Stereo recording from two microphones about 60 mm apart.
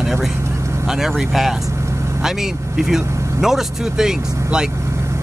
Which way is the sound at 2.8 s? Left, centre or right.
Centre.